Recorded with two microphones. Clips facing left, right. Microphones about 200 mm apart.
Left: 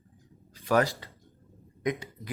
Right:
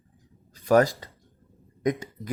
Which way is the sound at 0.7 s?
45° right (ahead or behind).